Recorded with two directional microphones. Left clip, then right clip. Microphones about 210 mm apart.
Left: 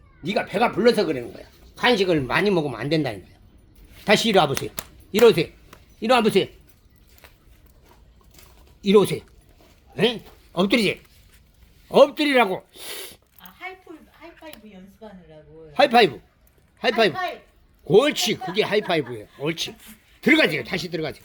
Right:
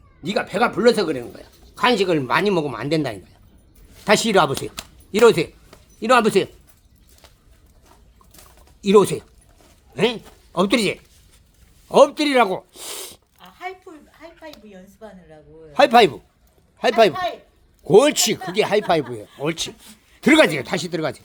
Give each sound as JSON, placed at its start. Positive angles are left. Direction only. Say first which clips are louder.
{"t": 0.2, "sound": "speech", "louder": "right 2 dB", "side_deg": -10}
{"t": 8.8, "sound": "speech", "louder": "right 3 dB", "side_deg": -15}
{"t": 13.4, "sound": "zipper", "louder": "right 4 dB", "side_deg": -45}
{"t": 15.7, "sound": "a man's voice", "louder": "right 3 dB", "side_deg": -15}